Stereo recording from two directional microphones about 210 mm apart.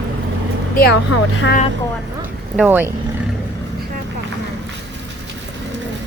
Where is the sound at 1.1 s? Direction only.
90° left.